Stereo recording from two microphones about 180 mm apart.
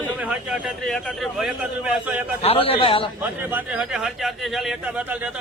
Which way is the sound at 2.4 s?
30° left (ahead or behind).